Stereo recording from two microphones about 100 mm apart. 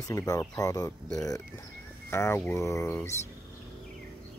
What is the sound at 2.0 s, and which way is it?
Speech, 25° left (ahead or behind).